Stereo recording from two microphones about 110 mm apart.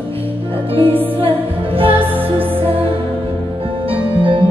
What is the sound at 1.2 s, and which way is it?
Music, 55° right (ahead or behind).